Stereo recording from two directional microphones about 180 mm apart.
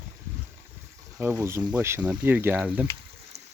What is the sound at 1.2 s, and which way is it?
Speech, 15° right (ahead or behind).